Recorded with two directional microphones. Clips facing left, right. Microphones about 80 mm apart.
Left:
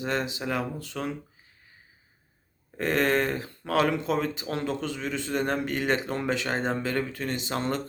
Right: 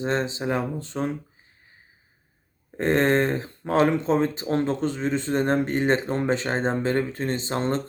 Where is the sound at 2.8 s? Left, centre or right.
Right.